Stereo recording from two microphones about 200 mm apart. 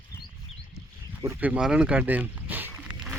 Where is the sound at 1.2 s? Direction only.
10° right (ahead or behind).